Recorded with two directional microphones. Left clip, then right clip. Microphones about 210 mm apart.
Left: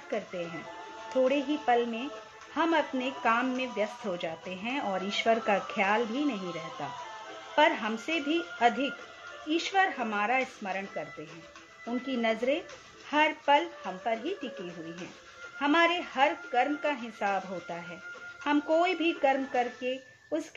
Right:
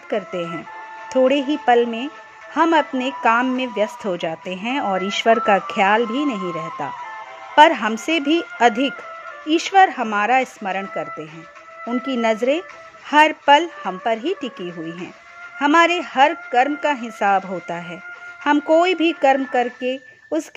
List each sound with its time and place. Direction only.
0.1 s a woman's voice: 40° right (ahead or behind)
15.6 s speech: 45° right (ahead or behind)